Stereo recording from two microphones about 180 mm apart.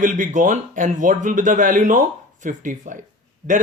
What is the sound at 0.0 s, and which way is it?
A man's voice, 45° right (ahead or behind).